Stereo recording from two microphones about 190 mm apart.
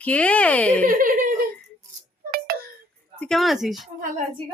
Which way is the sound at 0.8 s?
45° right (ahead or behind).